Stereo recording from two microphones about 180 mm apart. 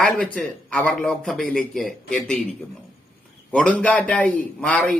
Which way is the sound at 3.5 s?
5° left (ahead or behind).